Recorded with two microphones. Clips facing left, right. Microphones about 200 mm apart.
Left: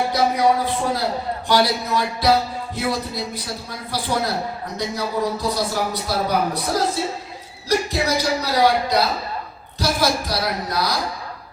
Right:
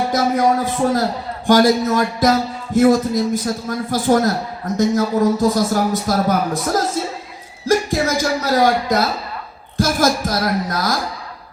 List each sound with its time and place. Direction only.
0.1 s music: 45° right (ahead or behind)